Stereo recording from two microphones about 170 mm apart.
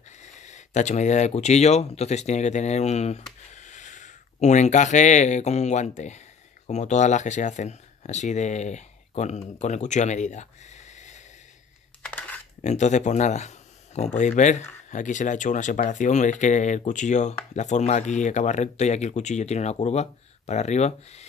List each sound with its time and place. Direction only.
0.2 s speech: 45° left (ahead or behind)
12.0 s a sound: 10° left (ahead or behind)
12.6 s speech: 45° left (ahead or behind)